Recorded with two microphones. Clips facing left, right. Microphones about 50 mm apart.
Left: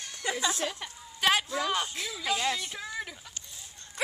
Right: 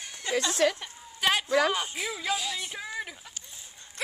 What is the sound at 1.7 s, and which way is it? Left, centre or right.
Speech, centre.